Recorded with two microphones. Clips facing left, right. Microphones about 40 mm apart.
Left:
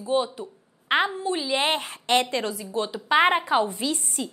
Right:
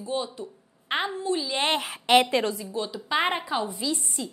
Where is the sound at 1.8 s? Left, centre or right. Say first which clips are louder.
Right 3 dB; centre.